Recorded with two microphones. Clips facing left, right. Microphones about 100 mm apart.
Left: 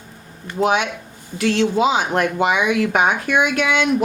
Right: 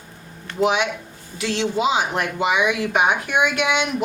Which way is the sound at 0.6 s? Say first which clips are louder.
Left 1 dB; 45° left (ahead or behind).